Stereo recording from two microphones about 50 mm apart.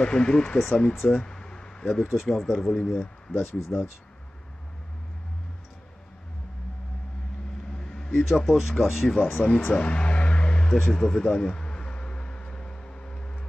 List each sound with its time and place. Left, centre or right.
0.0 s speech: centre
1.1 s a sound: centre
1.9 s speech: centre
3.3 s speech: left
7.7 s vehicle: centre
8.1 s speech: centre
9.8 s music: left
10.7 s a sound: centre